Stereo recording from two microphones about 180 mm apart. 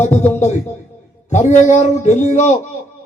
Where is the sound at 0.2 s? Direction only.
40° left (ahead or behind).